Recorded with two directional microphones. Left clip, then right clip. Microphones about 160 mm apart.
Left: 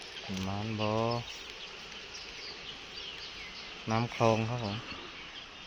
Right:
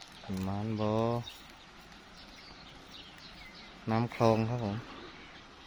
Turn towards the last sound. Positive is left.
turn(degrees=-30)  # may be behind; listen again after turning